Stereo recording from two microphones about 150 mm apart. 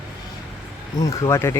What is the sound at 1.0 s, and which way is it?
Speech, 25° left (ahead or behind).